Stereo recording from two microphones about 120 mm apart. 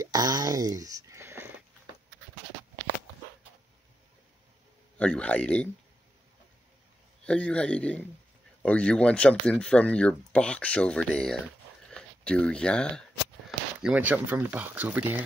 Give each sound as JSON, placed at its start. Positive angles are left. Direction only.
{"t": 0.0, "sound": "a sound", "side_deg": -35}
{"t": 4.9, "sound": "speech", "side_deg": 10}
{"t": 7.2, "sound": "speech", "side_deg": 10}
{"t": 13.5, "sound": "speech", "side_deg": -10}